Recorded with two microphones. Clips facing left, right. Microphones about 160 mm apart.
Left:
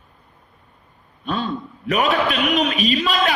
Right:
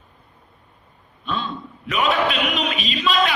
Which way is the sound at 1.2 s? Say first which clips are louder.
Left 3 dB; 40° left (ahead or behind).